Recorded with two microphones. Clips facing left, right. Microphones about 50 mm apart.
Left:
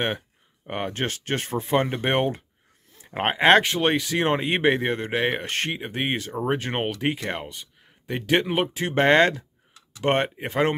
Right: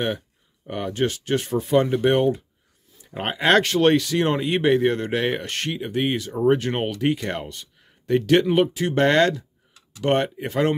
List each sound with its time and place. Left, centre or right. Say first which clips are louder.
0.7 s speech: right 4 dB; left
3.6 s speech: right 5 dB; centre
6.3 s speech: right 9 dB; centre
6.6 s speech: right 2 dB; left